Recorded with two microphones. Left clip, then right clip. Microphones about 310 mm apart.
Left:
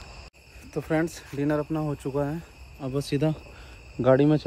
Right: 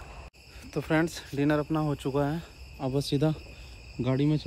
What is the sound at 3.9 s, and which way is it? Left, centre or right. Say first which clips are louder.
Speech: left 9 dB; centre.